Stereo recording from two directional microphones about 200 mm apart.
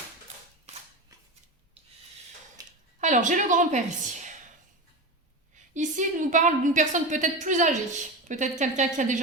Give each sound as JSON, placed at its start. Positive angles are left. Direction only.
{"t": 3.0, "sound": "a woman's voice", "side_deg": -40}
{"t": 5.5, "sound": "a woman's voice", "side_deg": -40}